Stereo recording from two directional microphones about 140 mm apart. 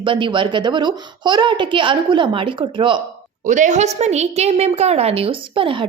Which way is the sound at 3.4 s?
60° right (ahead or behind).